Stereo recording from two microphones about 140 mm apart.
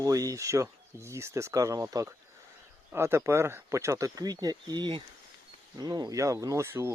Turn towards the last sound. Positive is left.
turn(degrees=-20)  # may be behind; listen again after turning